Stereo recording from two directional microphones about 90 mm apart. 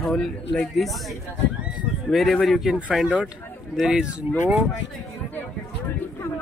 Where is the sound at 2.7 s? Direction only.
15° right (ahead or behind).